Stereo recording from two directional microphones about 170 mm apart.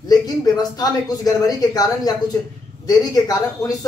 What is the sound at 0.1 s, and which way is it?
Speech, 20° left (ahead or behind).